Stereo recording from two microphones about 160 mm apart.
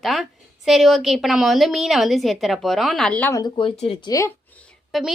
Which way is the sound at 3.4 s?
30° left (ahead or behind).